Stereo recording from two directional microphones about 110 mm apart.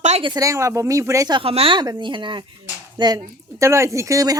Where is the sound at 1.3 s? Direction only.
60° right (ahead or behind).